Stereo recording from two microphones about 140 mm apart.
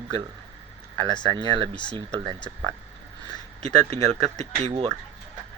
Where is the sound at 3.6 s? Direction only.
50° right (ahead or behind).